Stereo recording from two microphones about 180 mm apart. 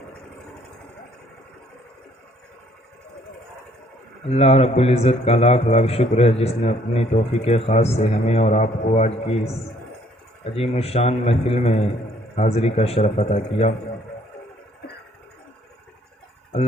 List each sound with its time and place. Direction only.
4.3 s a man's voice: 35° left (ahead or behind)